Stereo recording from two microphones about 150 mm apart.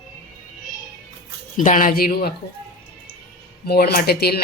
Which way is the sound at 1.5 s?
60° left (ahead or behind).